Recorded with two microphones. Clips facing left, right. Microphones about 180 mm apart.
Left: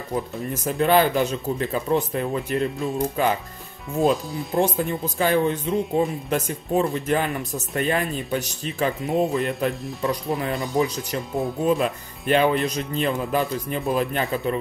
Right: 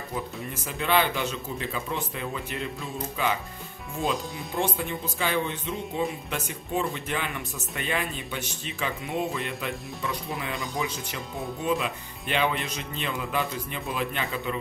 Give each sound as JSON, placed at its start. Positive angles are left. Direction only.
{"t": 0.7, "sound": "speech", "side_deg": 45}
{"t": 4.3, "sound": "speech", "side_deg": 0}
{"t": 4.6, "sound": "speech", "side_deg": 40}
{"t": 10.5, "sound": "speech", "side_deg": 0}
{"t": 11.6, "sound": "speech", "side_deg": 40}